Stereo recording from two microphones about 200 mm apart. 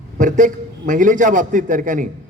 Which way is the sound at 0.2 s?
40° right (ahead or behind).